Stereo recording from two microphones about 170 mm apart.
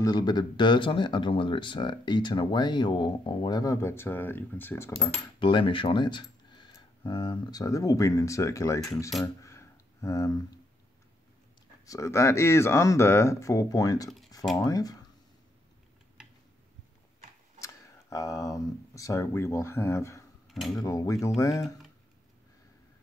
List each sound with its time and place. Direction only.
0.0 s speech: 25° left (ahead or behind)
5.4 s speech: 30° left (ahead or behind)
9.4 s a sound: 15° left (ahead or behind)
11.8 s speech: 20° left (ahead or behind)
18.1 s speech: 20° left (ahead or behind)
20.4 s speech: centre (ahead or behind)
20.8 s speech: 20° left (ahead or behind)